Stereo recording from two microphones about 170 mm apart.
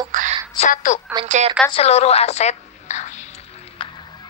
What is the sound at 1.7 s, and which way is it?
A woman's voice, 40° left (ahead or behind).